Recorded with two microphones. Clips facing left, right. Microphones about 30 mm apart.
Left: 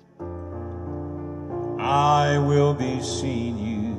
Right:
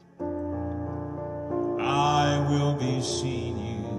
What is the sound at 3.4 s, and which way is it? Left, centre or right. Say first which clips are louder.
Music: left 5 dB; left.